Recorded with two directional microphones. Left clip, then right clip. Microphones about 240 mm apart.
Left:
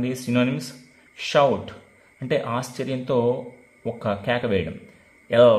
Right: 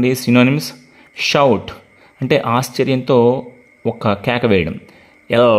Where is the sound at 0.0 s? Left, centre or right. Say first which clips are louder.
Right 10 dB; right.